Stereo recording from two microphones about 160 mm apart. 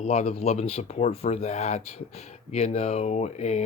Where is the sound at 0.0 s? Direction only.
45° left (ahead or behind).